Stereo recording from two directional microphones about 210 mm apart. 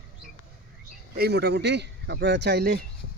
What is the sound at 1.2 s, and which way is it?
Speech, 50° right (ahead or behind).